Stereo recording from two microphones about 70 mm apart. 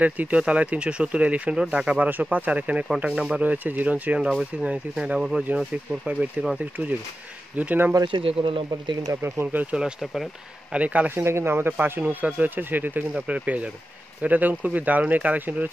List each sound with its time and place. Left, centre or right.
0.0 s speech: right
6.6 s speech: right
8.1 s speech: right
9.2 s speech: right
11.1 s speech: right